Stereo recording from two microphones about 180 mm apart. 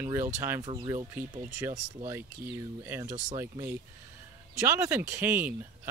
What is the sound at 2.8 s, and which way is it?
Speech, 20° right (ahead or behind).